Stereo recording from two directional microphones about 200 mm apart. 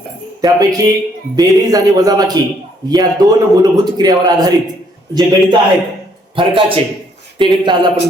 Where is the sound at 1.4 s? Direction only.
20° right (ahead or behind).